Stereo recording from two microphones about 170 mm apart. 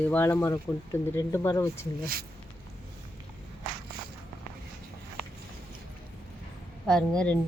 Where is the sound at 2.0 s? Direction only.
60° right (ahead or behind).